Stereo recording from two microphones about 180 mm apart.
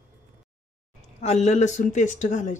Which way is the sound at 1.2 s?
40° left (ahead or behind).